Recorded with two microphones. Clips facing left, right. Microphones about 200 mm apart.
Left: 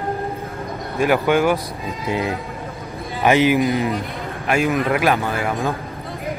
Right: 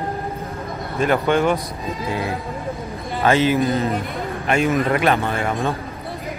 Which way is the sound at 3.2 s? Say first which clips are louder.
Left 2 dB; 15° left (ahead or behind).